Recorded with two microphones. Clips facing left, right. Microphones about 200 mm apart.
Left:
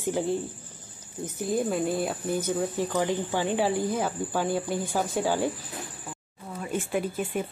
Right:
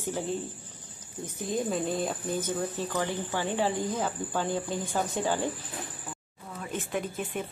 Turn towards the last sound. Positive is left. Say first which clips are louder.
# left 4 dB
turn(degrees=10)  # may be behind; listen again after turning